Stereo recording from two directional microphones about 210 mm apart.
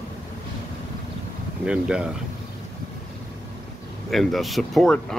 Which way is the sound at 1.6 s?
5° right (ahead or behind).